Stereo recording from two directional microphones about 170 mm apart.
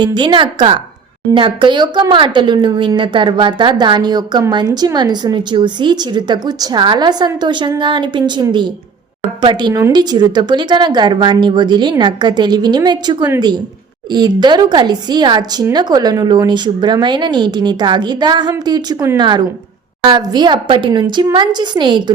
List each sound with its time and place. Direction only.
0.0 s speech: 25° right (ahead or behind)